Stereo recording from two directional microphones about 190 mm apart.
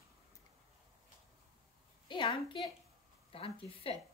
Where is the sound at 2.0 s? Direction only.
25° left (ahead or behind).